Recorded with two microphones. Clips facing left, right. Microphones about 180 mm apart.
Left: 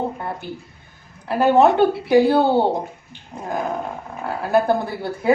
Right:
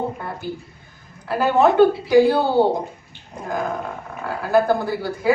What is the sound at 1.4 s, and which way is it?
Speech, 20° left (ahead or behind).